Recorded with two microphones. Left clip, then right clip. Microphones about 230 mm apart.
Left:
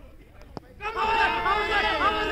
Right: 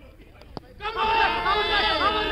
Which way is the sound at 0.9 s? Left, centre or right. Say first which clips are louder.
Right 2 dB; left.